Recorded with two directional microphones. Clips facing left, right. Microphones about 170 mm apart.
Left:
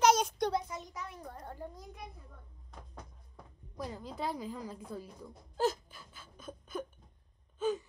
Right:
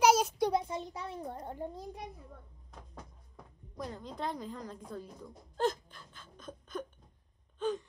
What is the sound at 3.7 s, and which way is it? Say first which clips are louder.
A woman's voice: even; 5° left (ahead or behind).